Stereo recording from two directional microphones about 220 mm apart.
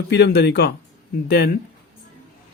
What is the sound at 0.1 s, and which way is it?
Speech, 50° left (ahead or behind).